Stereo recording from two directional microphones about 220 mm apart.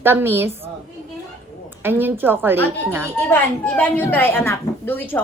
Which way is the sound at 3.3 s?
5° left (ahead or behind).